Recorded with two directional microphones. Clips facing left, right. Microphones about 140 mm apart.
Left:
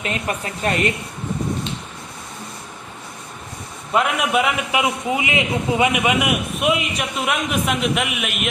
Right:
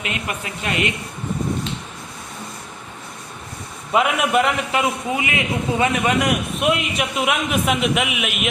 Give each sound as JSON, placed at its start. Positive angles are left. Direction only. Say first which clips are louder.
{"t": 0.0, "sound": "speech", "louder": "left 3 dB", "side_deg": 35}
{"t": 3.9, "sound": "a man's voice", "louder": "right 1 dB", "side_deg": 0}
{"t": 4.7, "sound": "a man's voice", "louder": "left 1 dB", "side_deg": 15}